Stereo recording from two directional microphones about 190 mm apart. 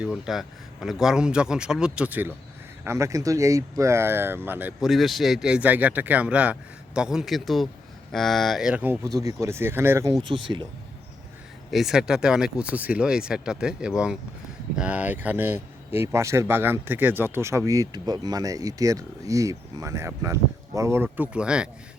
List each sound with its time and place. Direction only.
0.0 s speech: centre (ahead or behind); by 10.4 s 25° right (ahead or behind)
11.7 s speech: centre (ahead or behind)